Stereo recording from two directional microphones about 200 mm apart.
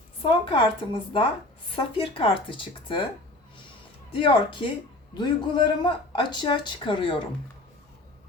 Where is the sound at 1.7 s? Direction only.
25° left (ahead or behind).